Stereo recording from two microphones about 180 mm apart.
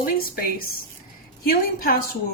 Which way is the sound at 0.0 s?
55° left (ahead or behind).